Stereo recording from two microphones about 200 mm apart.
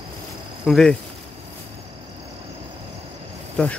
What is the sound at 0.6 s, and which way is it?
Speech, centre (ahead or behind).